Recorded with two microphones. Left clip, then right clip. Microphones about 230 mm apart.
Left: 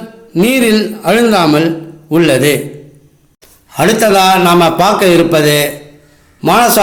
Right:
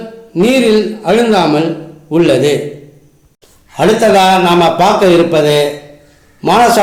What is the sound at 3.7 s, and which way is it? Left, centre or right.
A man's voice, left.